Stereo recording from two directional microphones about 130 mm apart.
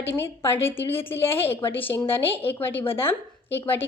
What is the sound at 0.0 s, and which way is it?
A woman's voice, 20° left (ahead or behind).